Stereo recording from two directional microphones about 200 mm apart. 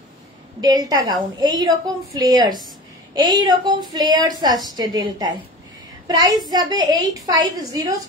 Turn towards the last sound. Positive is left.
turn(degrees=-20)  # may be behind; listen again after turning